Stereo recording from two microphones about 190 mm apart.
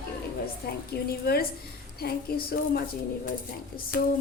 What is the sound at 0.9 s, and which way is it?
A woman's voice, 55° left (ahead or behind).